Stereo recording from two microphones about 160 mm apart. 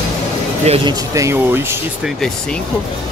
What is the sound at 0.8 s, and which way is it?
Speech, 20° right (ahead or behind).